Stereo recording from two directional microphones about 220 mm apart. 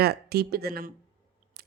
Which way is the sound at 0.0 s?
45° right (ahead or behind).